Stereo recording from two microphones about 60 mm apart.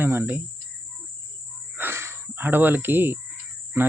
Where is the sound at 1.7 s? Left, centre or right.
Right.